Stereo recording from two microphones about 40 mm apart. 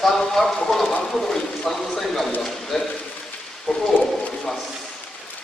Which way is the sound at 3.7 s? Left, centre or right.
Left.